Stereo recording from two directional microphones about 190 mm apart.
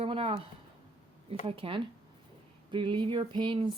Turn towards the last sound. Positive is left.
turn(degrees=-25)  # may be behind; listen again after turning